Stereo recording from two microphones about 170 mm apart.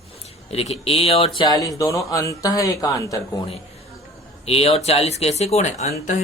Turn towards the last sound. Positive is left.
turn(degrees=45)  # may be behind; listen again after turning